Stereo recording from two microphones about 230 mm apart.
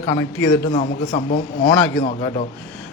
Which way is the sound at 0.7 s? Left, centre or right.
Left.